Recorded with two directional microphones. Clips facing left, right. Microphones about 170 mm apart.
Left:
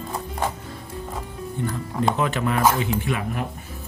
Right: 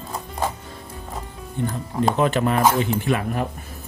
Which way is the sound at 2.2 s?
35° right (ahead or behind).